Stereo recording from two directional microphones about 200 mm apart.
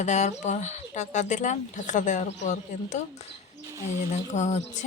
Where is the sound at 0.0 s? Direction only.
35° left (ahead or behind).